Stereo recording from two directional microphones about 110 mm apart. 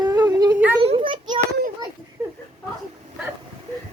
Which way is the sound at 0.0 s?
35° right (ahead or behind).